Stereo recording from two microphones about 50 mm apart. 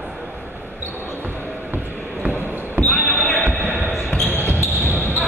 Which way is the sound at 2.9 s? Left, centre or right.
Left.